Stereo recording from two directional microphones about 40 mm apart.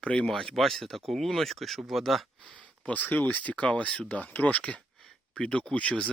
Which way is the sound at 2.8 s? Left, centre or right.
Left.